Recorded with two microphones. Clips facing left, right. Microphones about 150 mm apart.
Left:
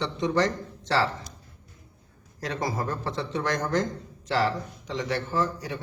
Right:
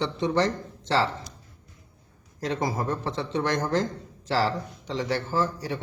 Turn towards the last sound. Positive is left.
turn(degrees=-30)  # may be behind; listen again after turning